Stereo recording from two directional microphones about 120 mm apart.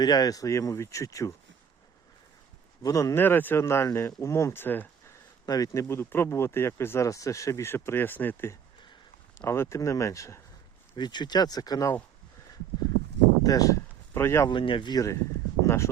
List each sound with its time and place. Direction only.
0.0 s speech: 35° left (ahead or behind)
2.8 s speech: 25° left (ahead or behind)
5.5 s speech: 30° left (ahead or behind)
10.9 s speech: 40° left (ahead or behind)
13.4 s speech: 30° left (ahead or behind)
14.5 s speech: 45° left (ahead or behind); by 15.2 s 30° left (ahead or behind)
15.6 s a sound: 25° left (ahead or behind)